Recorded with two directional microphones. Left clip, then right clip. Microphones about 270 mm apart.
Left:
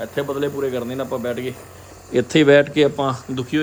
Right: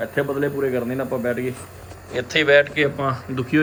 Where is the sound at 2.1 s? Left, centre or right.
Left.